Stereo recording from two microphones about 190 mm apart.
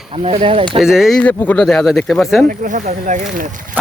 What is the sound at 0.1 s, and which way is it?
Speech, 30° right (ahead or behind).